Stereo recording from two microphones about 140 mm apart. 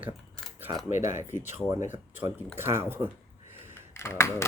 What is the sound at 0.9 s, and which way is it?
Speech, 15° right (ahead or behind).